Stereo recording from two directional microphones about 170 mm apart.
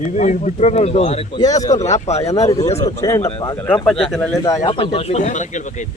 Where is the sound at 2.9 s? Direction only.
15° left (ahead or behind).